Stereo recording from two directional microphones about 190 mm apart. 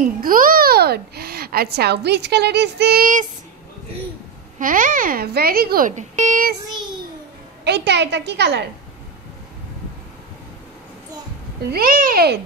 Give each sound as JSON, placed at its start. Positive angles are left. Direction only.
{"t": 0.2, "sound": "a child's voice", "side_deg": -45}
{"t": 4.6, "sound": "speech", "side_deg": -45}
{"t": 7.6, "sound": "a woman's voice", "side_deg": -65}
{"t": 11.7, "sound": "speech", "side_deg": -50}